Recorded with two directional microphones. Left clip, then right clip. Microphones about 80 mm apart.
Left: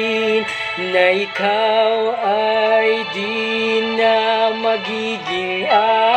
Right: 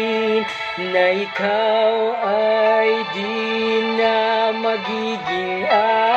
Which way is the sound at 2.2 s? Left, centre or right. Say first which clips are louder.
Right 1 dB; centre.